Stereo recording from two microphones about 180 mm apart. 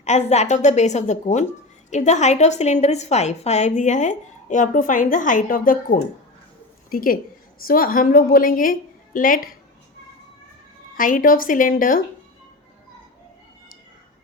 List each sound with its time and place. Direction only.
0.0 s a woman's voice: 40° left (ahead or behind)
10.9 s a woman's voice: 50° left (ahead or behind)